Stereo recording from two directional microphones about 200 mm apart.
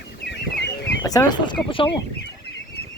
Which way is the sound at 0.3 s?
60° left (ahead or behind).